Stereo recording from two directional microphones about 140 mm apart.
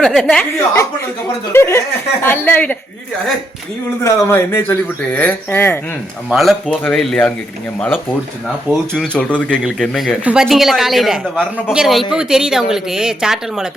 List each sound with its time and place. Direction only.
0.0 s speech: centre (ahead or behind)
1.5 s speech: 15° left (ahead or behind)
4.0 s speech: 15° left (ahead or behind)
6.3 s speech: centre (ahead or behind)